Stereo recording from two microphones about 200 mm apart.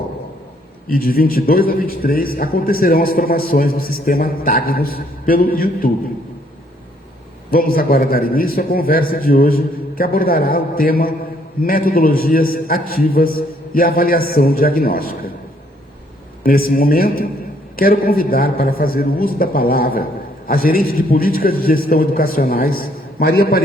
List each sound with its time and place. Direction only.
0.9 s a man's voice: 45° left (ahead or behind)
7.5 s a man's voice: 45° left (ahead or behind)
16.4 s a man's voice: 45° left (ahead or behind)